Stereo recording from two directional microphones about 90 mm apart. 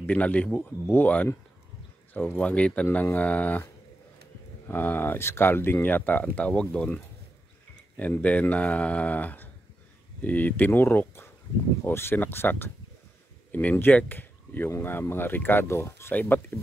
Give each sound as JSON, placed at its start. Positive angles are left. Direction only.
{"t": 0.0, "sound": "speech", "side_deg": 15}
{"t": 4.6, "sound": "speech", "side_deg": 20}
{"t": 8.0, "sound": "speech", "side_deg": 15}